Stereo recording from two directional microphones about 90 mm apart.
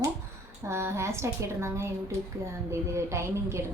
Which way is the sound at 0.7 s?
30° right (ahead or behind).